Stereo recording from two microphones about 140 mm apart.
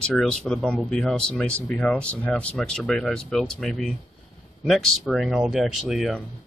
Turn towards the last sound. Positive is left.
turn(degrees=0)  # may be behind; listen again after turning